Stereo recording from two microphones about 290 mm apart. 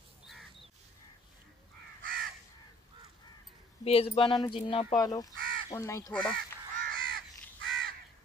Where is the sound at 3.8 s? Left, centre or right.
Centre.